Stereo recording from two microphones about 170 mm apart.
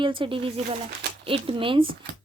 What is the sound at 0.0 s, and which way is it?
A woman's voice, 30° right (ahead or behind).